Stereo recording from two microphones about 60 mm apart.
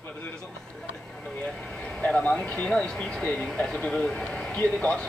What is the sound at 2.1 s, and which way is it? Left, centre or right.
Speech, centre.